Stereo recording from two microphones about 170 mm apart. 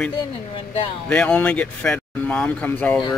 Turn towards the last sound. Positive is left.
turn(degrees=10)  # may be behind; listen again after turning